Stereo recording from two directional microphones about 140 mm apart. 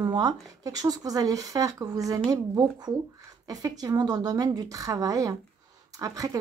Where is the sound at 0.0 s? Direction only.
30° right (ahead or behind).